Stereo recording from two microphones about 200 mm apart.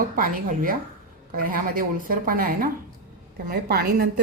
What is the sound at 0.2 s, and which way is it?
A woman's voice, 45° right (ahead or behind).